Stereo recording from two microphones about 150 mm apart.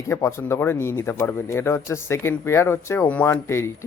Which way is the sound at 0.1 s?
20° left (ahead or behind).